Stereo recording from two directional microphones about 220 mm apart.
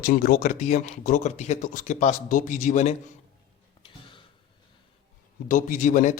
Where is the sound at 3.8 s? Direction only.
20° left (ahead or behind).